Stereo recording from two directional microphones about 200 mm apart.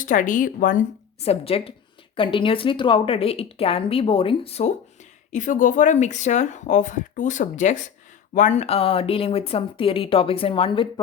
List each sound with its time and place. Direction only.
0.0 s speech: 40° left (ahead or behind)
1.2 s speech: 30° left (ahead or behind)